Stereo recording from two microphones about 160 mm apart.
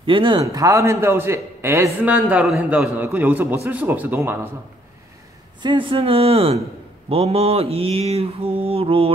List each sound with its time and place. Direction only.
0.0 s a man's voice: 35° right (ahead or behind); by 4.5 s 15° right (ahead or behind)
5.6 s mantra: 30° right (ahead or behind)